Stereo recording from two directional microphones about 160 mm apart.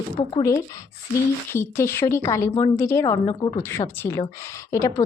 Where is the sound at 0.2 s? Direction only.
35° left (ahead or behind).